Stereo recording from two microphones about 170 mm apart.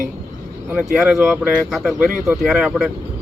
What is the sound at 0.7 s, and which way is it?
A man's voice, 5° right (ahead or behind).